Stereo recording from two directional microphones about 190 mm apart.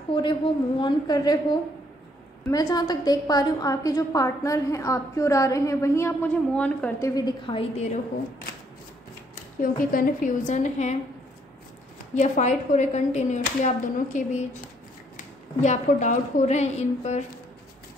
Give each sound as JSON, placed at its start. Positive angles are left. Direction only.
{"t": 0.1, "sound": "a woman's voice", "side_deg": 25}
{"t": 2.4, "sound": "a woman's voice", "side_deg": 20}
{"t": 7.2, "sound": "a woman's voice", "side_deg": 25}
{"t": 9.6, "sound": "speech", "side_deg": 45}
{"t": 12.2, "sound": "speech", "side_deg": 40}